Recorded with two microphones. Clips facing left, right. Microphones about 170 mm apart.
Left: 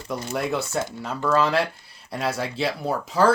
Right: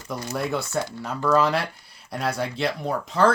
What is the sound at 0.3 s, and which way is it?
Speech, centre (ahead or behind).